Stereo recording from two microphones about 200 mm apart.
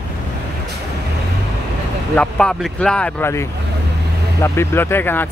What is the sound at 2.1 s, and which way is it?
Speech, 5° left (ahead or behind).